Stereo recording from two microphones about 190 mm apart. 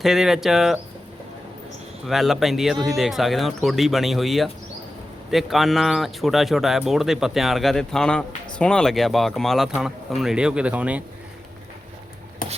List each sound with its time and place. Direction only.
0.0 s speech: centre (ahead or behind)
2.0 s speech: centre (ahead or behind)
12.4 s a sound: 45° left (ahead or behind)